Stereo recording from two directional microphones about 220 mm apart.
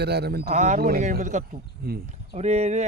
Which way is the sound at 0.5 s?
35° right (ahead or behind).